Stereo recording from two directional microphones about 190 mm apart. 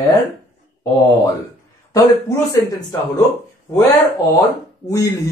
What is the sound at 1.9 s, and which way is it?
Speech, 15° left (ahead or behind).